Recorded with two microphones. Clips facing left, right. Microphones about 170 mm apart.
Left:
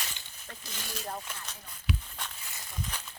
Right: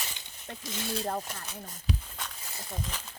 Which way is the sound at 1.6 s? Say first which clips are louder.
Right 4 dB; 40° right (ahead or behind).